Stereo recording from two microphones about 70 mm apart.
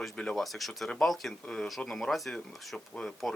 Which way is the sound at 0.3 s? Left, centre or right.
Centre.